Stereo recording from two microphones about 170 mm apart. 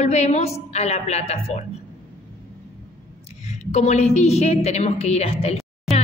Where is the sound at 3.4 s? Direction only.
40° left (ahead or behind).